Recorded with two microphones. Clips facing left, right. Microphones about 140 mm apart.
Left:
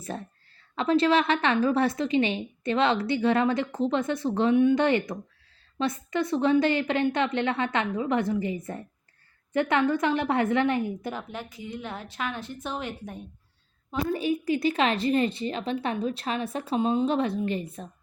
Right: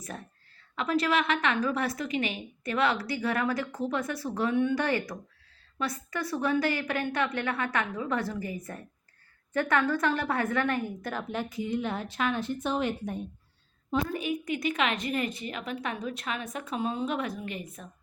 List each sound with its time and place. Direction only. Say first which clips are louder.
0.0 s a woman's voice: left 6 dB; 25° left (ahead or behind)
14.1 s a woman's voice: left 5 dB; 30° left (ahead or behind)